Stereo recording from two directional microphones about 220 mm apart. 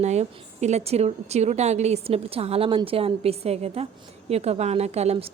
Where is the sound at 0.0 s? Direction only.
30° right (ahead or behind).